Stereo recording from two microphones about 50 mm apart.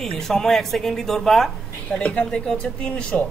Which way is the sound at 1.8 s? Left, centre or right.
Left.